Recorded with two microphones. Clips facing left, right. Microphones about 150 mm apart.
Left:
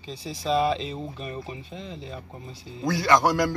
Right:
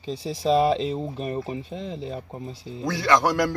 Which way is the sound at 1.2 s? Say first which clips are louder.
Right 6 dB; 55° right (ahead or behind).